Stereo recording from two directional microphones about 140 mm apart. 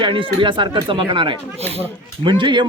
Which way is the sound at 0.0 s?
40° right (ahead or behind).